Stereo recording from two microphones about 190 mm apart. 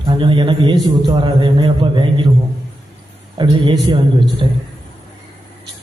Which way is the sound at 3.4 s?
25° right (ahead or behind).